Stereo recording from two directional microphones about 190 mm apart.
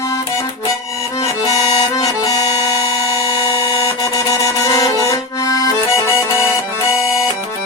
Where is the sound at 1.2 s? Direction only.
20° left (ahead or behind).